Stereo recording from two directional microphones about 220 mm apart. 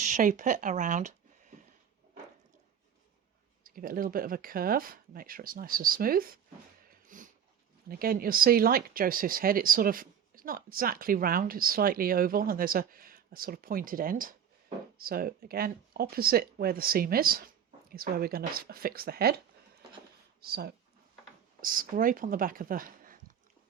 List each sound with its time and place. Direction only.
0.0 s speech: 35° right (ahead or behind)
3.6 s speech: 40° right (ahead or behind)
7.1 s dog: 35° right (ahead or behind)
7.9 s speech: 40° right (ahead or behind)
20.4 s speech: 45° right (ahead or behind)